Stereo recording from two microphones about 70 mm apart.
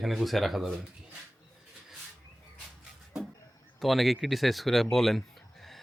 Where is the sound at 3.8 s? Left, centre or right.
Centre.